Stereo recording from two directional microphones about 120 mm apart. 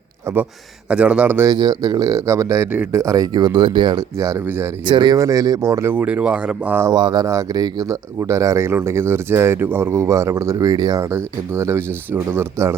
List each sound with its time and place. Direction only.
0.3 s speech: 25° right (ahead or behind)
0.9 s speech: 10° right (ahead or behind)
1.5 s speech: 30° right (ahead or behind)
4.2 s speech: 25° right (ahead or behind)
4.9 s speech: 40° right (ahead or behind)
5.1 s speech: 30° right (ahead or behind)
6.0 s speech: 10° right (ahead or behind)
6.9 s speech: 35° right (ahead or behind); by 12.7 s 20° right (ahead or behind)